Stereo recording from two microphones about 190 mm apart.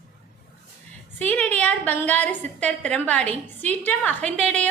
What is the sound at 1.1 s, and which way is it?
A woman's voice, 5° left (ahead or behind).